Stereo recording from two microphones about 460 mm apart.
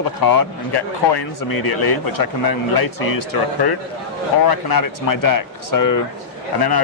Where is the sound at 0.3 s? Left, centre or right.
Left.